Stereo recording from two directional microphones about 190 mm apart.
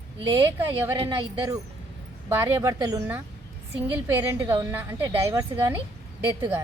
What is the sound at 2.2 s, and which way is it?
A woman's voice, 15° right (ahead or behind).